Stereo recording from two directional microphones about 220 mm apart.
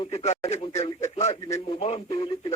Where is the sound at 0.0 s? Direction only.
30° left (ahead or behind).